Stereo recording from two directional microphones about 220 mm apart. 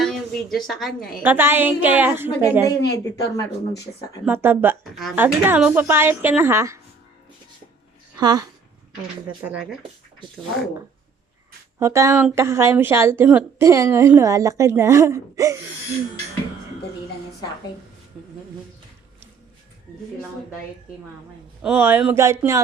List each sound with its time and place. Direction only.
0.0 s a woman's voice: centre (ahead or behind)
2.9 s speech: 15° left (ahead or behind)
4.3 s a woman's voice: 10° right (ahead or behind)
8.1 s a woman's voice: 20° right (ahead or behind)
9.4 s a woman's voice: 5° right (ahead or behind)
11.8 s a woman's voice: 15° right (ahead or behind)
21.6 s a woman's voice: 5° right (ahead or behind)